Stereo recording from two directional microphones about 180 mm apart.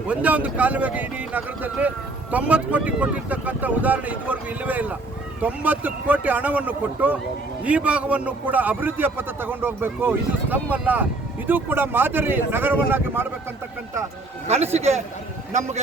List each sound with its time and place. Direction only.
0.1 s a man's voice: 10° right (ahead or behind)
14.4 s a man's voice: 35° right (ahead or behind)